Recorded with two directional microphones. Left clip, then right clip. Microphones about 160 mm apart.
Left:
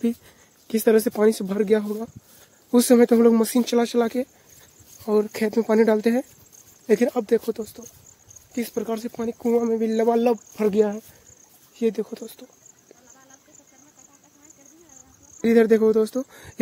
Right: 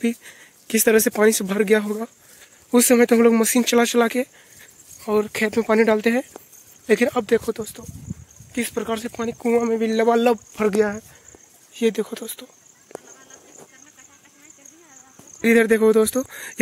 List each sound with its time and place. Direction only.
0.0 s speech: 5° left (ahead or behind)
2.7 s speech: 15° left (ahead or behind)
5.0 s speech: 20° left (ahead or behind); by 10.7 s 5° left (ahead or behind)
10.7 s speech: 25° left (ahead or behind)
11.7 s speech: centre (ahead or behind)
15.4 s speech: 5° right (ahead or behind)